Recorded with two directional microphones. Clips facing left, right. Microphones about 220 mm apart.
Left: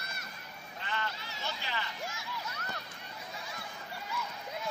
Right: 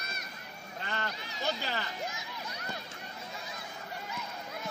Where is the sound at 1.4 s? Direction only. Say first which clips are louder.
Right 5 dB; 40° right (ahead or behind).